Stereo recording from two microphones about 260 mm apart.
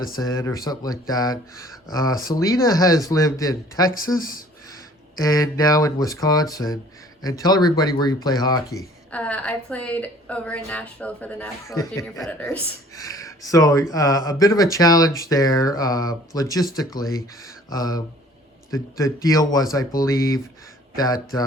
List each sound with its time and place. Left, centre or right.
0.1 s speech: centre
3.9 s speech: left
5.2 s speech: centre